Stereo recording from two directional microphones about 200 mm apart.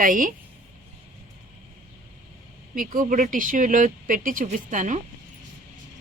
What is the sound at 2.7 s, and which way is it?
Speech, 45° right (ahead or behind).